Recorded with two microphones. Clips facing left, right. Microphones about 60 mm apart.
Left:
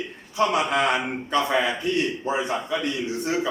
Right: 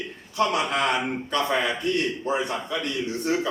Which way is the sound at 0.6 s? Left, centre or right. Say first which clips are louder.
Left 2 dB; centre.